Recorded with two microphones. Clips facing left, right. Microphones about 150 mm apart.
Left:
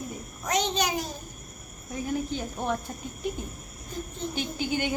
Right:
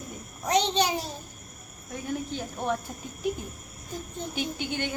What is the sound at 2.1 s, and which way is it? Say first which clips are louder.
Speech: left 2 dB; centre (ahead or behind).